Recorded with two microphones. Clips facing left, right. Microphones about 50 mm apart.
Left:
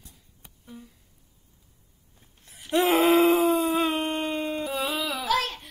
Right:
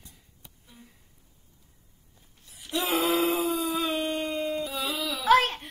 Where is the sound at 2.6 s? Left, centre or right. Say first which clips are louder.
Left 6 dB; left.